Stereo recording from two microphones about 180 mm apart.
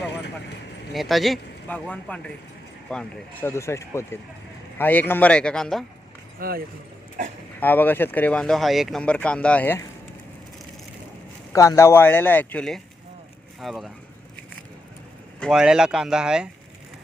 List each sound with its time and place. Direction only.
0.9 s speech: centre (ahead or behind)
3.5 s speech: 15° left (ahead or behind)
6.4 s speech: 55° right (ahead or behind)
7.6 s speech: 10° left (ahead or behind)
11.5 s speech: 20° left (ahead or behind); by 13.9 s centre (ahead or behind)
15.4 s speech: centre (ahead or behind)